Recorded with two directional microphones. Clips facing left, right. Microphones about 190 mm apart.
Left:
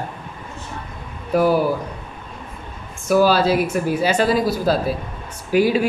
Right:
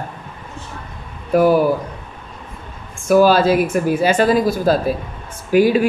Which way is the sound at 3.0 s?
50° right (ahead or behind).